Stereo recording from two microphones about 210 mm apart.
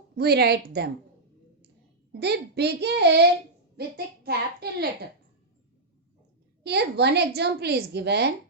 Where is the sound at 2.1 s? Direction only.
50° right (ahead or behind).